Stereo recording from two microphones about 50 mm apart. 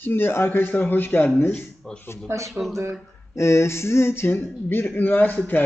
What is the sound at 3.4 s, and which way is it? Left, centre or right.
Speech, left.